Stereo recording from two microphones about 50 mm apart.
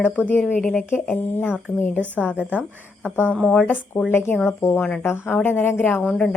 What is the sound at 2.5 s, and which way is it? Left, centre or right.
Speech, right.